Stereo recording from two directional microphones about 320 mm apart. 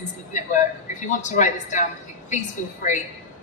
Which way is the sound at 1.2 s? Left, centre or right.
Left.